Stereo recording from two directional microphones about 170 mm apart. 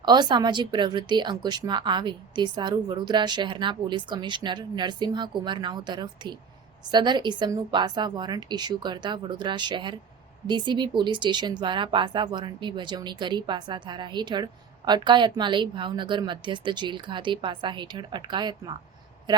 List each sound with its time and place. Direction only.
0.0 s speech: 25° right (ahead or behind)